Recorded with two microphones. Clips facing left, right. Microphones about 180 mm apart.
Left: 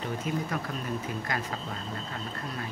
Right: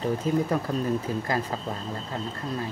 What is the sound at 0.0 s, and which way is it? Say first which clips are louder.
Speech: right 7 dB; 30° right (ahead or behind).